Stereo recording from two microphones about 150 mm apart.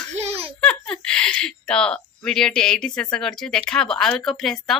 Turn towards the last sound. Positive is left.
turn(degrees=0)  # may be behind; listen again after turning